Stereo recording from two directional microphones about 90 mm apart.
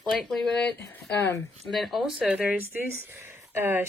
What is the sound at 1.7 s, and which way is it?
Speech, centre (ahead or behind).